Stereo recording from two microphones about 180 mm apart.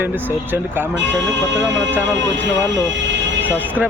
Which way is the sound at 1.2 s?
80° right.